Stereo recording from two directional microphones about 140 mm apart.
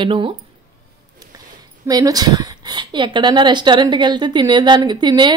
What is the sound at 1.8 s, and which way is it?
A woman's voice, 25° right (ahead or behind).